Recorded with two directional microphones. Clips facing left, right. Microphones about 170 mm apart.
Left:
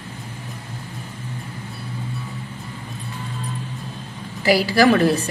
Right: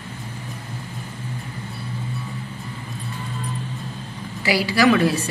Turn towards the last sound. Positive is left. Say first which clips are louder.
# left 2 dB
turn(degrees=45)  # may be behind; listen again after turning